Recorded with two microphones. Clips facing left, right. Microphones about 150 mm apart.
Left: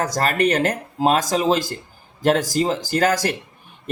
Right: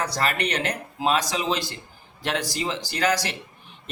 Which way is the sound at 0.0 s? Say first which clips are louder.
Left 6 dB; 45° left (ahead or behind).